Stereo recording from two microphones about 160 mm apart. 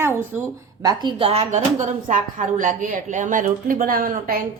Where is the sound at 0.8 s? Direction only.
30° right (ahead or behind); by 4.4 s 65° right (ahead or behind).